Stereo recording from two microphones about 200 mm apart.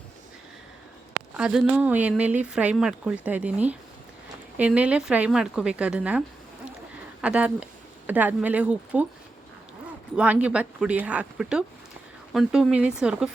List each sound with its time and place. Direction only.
1.3 s a woman's voice: 5° right (ahead or behind)
10.2 s a woman's voice: 5° right (ahead or behind)